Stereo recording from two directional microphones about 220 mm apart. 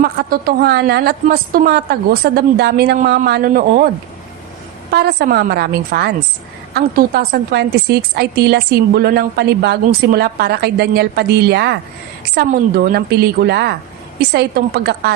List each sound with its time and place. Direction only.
0.0 s a woman's voice: 45° right (ahead or behind)
4.9 s a woman's voice: 45° right (ahead or behind)